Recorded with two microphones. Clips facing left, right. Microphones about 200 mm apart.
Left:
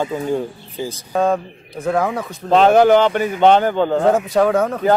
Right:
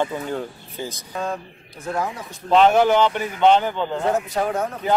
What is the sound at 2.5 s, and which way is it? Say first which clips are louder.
A man's voice: left 4 dB; 40° left (ahead or behind).